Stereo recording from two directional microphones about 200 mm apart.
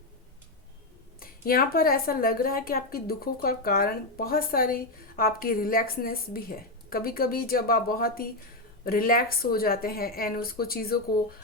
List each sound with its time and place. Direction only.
1.2 s a woman's voice: 45° left (ahead or behind)